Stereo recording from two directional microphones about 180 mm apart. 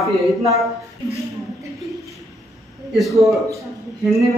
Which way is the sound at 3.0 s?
Centre (ahead or behind).